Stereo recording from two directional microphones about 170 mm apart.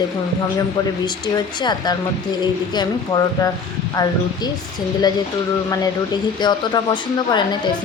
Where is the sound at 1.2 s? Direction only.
25° left (ahead or behind).